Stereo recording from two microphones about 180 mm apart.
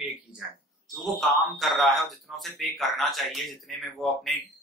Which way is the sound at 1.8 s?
Centre (ahead or behind).